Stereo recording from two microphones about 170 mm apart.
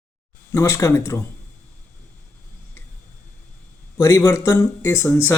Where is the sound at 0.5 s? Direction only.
20° left (ahead or behind).